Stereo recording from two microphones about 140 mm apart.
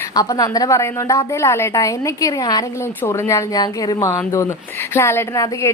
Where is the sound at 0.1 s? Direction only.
25° left (ahead or behind).